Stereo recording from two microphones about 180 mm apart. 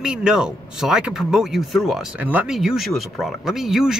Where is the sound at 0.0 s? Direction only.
5° right (ahead or behind).